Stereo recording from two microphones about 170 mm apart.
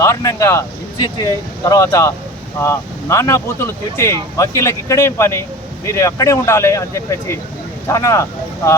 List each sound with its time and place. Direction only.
0.0 s speech: 15° left (ahead or behind)